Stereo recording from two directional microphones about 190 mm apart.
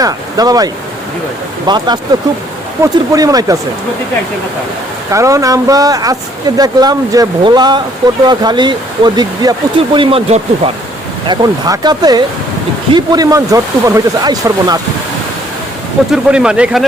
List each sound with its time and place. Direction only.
0.0 s speech: 20° right (ahead or behind)
5.1 s speech: 15° right (ahead or behind); by 10.4 s 30° right (ahead or behind)
11.3 s speech: 20° right (ahead or behind)
16.1 s speech: 5° right (ahead or behind)